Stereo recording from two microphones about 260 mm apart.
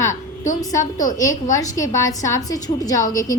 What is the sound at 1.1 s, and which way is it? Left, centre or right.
A woman's voice, centre.